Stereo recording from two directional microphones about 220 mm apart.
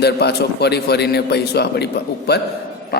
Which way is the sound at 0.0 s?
50° left (ahead or behind).